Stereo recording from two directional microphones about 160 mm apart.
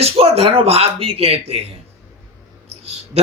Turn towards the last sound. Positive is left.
turn(degrees=-40)  # may be behind; listen again after turning